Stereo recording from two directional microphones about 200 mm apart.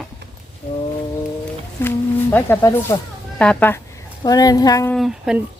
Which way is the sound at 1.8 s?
10° left (ahead or behind).